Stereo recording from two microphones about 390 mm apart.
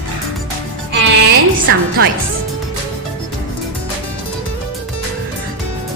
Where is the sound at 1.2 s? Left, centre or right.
Right.